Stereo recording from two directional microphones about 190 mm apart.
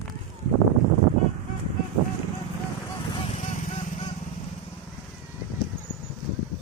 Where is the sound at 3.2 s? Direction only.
35° left (ahead or behind).